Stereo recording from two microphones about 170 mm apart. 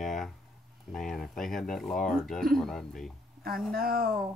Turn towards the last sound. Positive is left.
turn(degrees=-60)  # may be behind; listen again after turning